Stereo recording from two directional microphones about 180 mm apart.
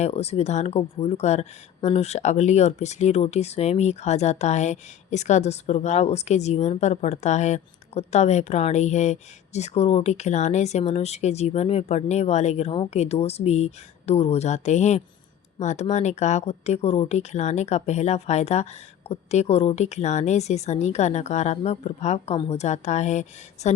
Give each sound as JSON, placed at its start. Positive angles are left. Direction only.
{"t": 0.0, "sound": "speech", "side_deg": 35}